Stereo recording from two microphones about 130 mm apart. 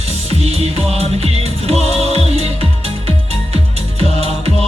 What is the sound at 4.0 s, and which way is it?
Music, 50° right (ahead or behind).